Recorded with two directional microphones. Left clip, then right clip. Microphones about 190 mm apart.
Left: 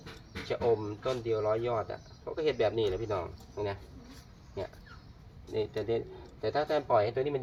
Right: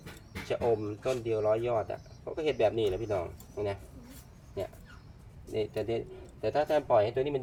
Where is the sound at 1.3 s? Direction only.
20° right (ahead or behind).